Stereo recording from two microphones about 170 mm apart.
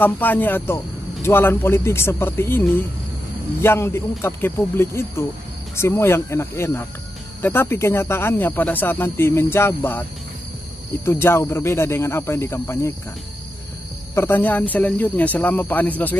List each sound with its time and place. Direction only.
0.0 s speech: 10° left (ahead or behind)
3.6 s speech: 15° left (ahead or behind)
11.1 s speech: 15° left (ahead or behind)
14.1 s speech: 15° left (ahead or behind)